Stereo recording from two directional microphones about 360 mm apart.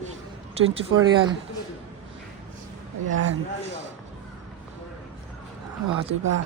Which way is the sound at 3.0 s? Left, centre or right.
Right.